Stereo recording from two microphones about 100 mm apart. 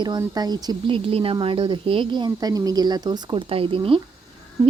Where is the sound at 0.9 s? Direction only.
65° right (ahead or behind); by 3.4 s 45° right (ahead or behind).